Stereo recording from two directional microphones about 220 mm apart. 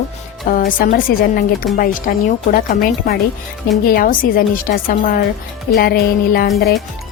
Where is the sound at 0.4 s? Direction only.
40° left (ahead or behind).